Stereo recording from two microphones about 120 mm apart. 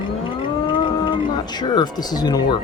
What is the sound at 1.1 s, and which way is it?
Speech, 35° left (ahead or behind).